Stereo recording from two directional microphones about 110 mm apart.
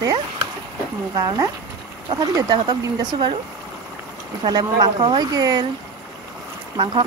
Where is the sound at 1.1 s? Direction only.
35° right (ahead or behind).